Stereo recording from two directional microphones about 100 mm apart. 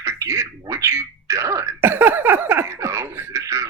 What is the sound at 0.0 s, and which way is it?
Throat clearing, 30° right (ahead or behind).